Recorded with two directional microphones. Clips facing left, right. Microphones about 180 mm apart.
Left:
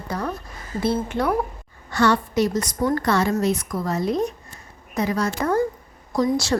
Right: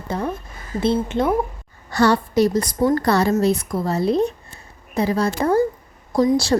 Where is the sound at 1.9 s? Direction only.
35° right (ahead or behind).